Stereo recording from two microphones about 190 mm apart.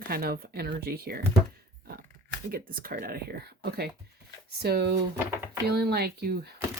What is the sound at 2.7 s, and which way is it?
Speech, 50° right (ahead or behind).